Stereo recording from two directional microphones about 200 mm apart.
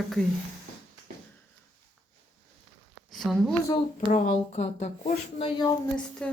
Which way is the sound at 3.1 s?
Centre (ahead or behind).